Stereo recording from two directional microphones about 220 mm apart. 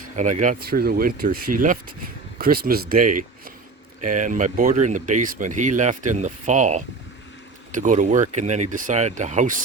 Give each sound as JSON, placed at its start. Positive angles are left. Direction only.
{"t": 0.2, "sound": "speech", "side_deg": -35}